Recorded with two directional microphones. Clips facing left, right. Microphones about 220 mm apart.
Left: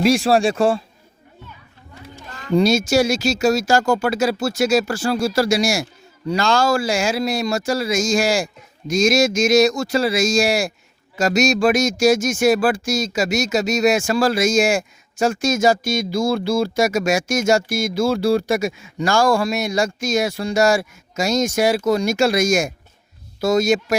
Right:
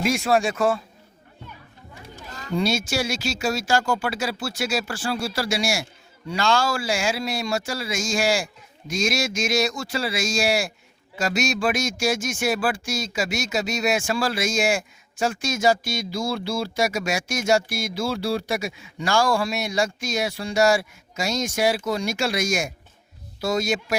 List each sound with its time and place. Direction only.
0.0 s speech: 35° left (ahead or behind)
2.5 s speech: 40° left (ahead or behind)